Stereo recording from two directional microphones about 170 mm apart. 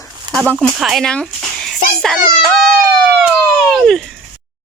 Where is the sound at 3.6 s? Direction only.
5° left (ahead or behind).